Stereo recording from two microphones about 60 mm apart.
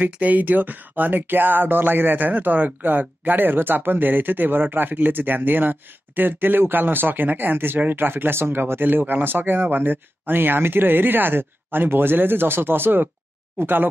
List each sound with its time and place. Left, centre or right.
0.0 s speech: right